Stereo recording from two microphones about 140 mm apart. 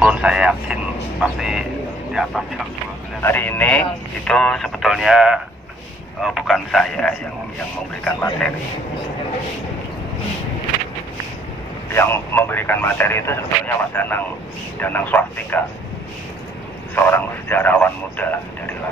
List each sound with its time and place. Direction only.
0.0 s speech: 5° right (ahead or behind)
3.2 s speech: 15° left (ahead or behind)
11.9 s speech: 15° left (ahead or behind)
16.9 s speech: 15° left (ahead or behind)